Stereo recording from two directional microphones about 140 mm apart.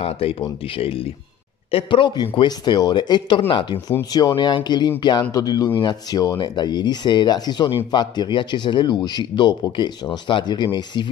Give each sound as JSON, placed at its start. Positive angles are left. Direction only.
{"t": 0.0, "sound": "speech", "side_deg": 45}
{"t": 4.1, "sound": "a man's voice", "side_deg": 30}